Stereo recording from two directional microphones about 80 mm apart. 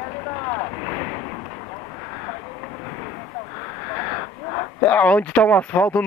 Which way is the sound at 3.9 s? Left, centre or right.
Left.